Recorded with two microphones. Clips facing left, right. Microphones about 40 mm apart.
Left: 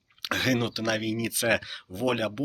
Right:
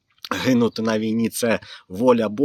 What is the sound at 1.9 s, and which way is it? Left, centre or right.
Speech, left.